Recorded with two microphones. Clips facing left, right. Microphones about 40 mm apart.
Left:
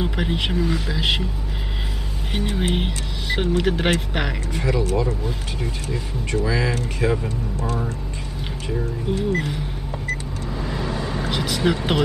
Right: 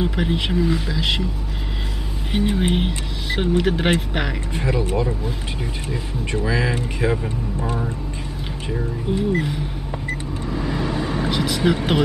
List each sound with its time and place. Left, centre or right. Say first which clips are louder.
0.0 s speech: right 2 dB; centre
0.9 s speech: even; centre
2.3 s speech: right 4 dB; centre
4.6 s speech: even; right
6.3 s speech: even; centre
10.6 s vehicle: right 3 dB; centre